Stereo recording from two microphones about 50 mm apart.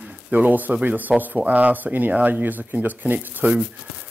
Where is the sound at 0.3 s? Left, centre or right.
Right.